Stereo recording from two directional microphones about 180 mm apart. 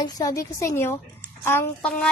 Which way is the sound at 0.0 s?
20° left (ahead or behind).